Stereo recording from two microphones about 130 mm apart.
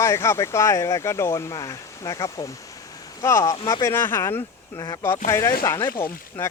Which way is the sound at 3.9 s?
15° left (ahead or behind).